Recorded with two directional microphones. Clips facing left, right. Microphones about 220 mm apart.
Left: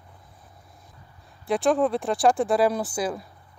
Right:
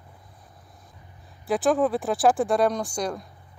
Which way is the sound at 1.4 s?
Centre (ahead or behind).